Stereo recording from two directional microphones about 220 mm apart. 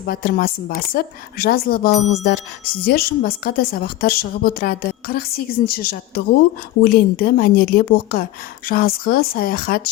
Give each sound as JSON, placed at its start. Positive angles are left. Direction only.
{"t": 0.0, "sound": "a woman's voice", "side_deg": 40}